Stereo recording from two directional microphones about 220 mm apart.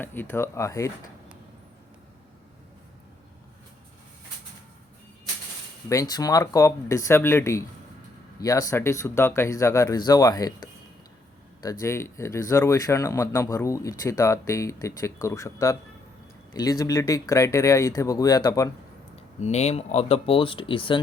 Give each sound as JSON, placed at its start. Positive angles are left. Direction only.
{"t": 0.0, "sound": "speech", "side_deg": 10}
{"t": 5.9, "sound": "speech", "side_deg": 15}
{"t": 19.4, "sound": "speech", "side_deg": 30}